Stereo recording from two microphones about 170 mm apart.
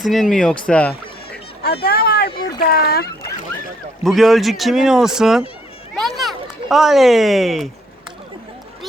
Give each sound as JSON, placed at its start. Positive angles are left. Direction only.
{"t": 0.0, "sound": "speech", "side_deg": 0}
{"t": 0.7, "sound": "music", "side_deg": 10}
{"t": 1.8, "sound": "speech", "side_deg": 65}
{"t": 4.0, "sound": "speech", "side_deg": 0}
{"t": 6.0, "sound": "a sound", "side_deg": 0}